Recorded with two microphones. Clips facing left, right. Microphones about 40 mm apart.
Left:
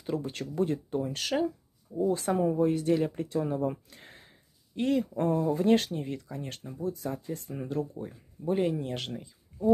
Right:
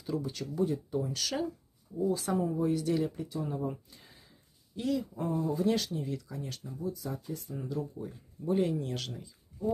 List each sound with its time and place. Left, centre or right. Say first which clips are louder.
0.0 s speech: left 2 dB; left
2.0 s speech: left 3 dB; left
2.7 s speech: left 3 dB; left
3.3 s speech: left 7 dB; left
4.7 s speech: left 5 dB; left
5.1 s speech: left 5 dB; left
8.5 s speech: left 2 dB; left